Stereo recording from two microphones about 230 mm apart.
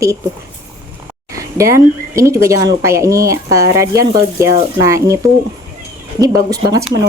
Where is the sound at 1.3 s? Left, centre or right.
Centre.